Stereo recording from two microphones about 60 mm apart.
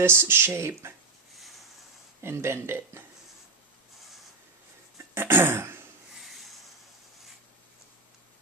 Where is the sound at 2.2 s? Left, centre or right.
Right.